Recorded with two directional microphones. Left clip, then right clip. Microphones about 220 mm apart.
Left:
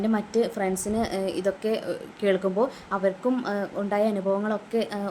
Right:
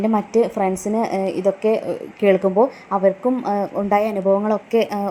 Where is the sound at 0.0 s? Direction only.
20° right (ahead or behind).